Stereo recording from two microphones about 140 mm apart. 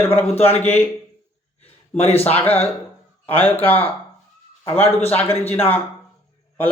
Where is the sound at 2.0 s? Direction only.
45° left (ahead or behind).